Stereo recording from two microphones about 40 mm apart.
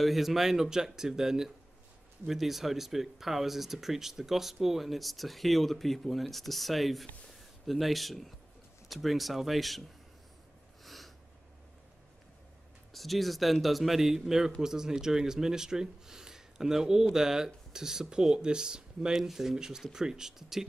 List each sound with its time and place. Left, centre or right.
0.0 s speech: centre
10.8 s snort: centre
12.9 s speech: centre
19.1 s speech: centre